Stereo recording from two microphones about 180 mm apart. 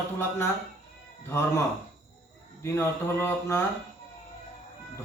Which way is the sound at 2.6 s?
15° left (ahead or behind).